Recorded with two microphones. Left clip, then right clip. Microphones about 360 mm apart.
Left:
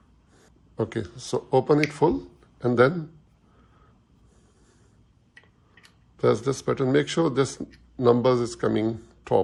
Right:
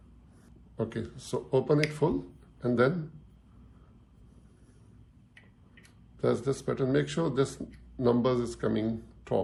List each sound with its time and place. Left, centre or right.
0.8 s speech: centre
6.1 s speech: left